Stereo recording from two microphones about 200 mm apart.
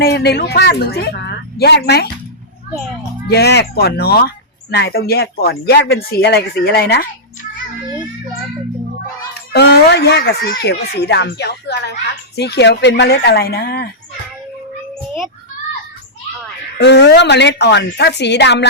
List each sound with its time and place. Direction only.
0.0 s speech: 50° left (ahead or behind)
3.2 s speech: 55° left (ahead or behind)
9.5 s speech: 55° left (ahead or behind)
16.7 s speech: 60° left (ahead or behind)